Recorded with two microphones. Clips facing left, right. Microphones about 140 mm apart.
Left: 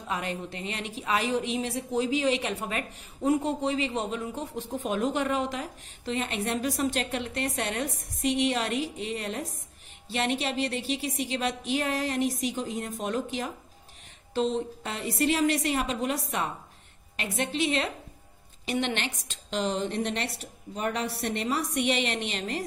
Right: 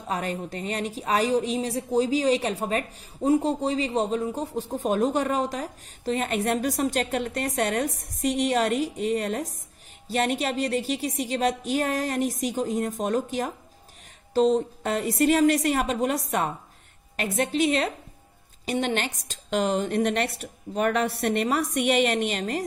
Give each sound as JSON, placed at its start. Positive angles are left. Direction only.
{"t": 0.1, "sound": "a woman's voice", "side_deg": -40}